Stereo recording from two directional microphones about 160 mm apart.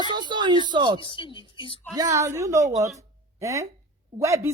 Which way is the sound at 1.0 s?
30° left (ahead or behind).